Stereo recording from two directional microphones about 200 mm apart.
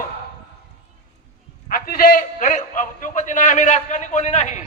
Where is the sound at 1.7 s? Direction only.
45° left (ahead or behind).